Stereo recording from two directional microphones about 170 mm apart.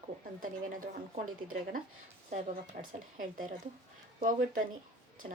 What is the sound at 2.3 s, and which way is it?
A woman's voice, 40° right (ahead or behind).